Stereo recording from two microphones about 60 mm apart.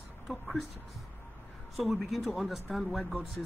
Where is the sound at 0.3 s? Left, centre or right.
Centre.